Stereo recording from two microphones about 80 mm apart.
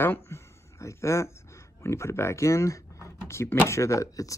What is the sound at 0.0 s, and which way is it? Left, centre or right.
Speech, left.